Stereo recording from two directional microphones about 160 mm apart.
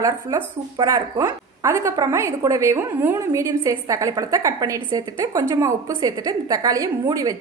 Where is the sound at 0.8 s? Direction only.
25° right (ahead or behind).